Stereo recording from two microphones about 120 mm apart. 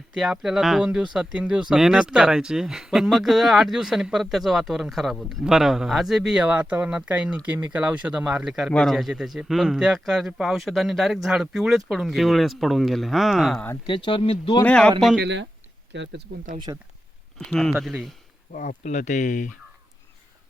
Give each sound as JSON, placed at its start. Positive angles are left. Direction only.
{"t": 0.1, "sound": "a man's voice", "side_deg": -5}
{"t": 13.8, "sound": "speech", "side_deg": 40}
{"t": 14.6, "sound": "speech", "side_deg": 10}
{"t": 16.7, "sound": "speech", "side_deg": -30}
{"t": 17.3, "sound": "a man's voice", "side_deg": 5}
{"t": 18.5, "sound": "speech", "side_deg": 90}